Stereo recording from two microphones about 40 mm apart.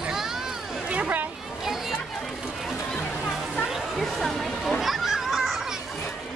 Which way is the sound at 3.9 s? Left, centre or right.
Centre.